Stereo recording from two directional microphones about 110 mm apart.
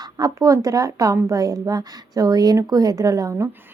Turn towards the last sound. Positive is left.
turn(degrees=-25)  # may be behind; listen again after turning